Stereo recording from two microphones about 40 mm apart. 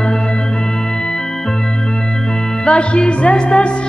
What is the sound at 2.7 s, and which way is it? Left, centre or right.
Music, left.